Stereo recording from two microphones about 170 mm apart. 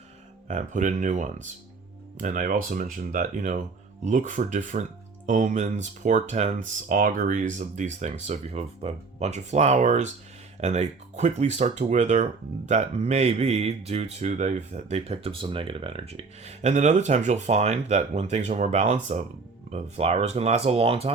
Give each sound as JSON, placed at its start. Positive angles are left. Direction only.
{"t": 0.4, "sound": "speech", "side_deg": -45}